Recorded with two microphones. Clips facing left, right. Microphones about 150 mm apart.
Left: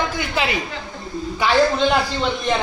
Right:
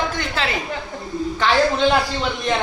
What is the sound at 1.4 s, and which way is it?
Speech, centre (ahead or behind).